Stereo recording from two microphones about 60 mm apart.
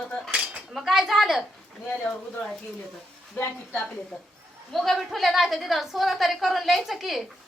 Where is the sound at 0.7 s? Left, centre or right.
Centre.